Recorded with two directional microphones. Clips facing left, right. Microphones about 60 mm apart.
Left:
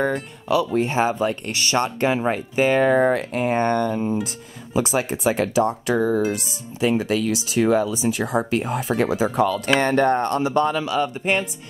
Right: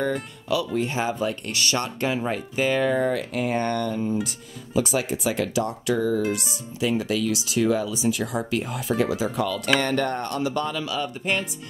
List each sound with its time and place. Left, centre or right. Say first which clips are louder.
0.7 s speech: left 5 dB; left